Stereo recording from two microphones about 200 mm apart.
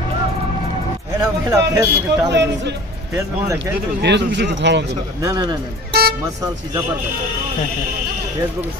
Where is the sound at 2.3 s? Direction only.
60° right (ahead or behind).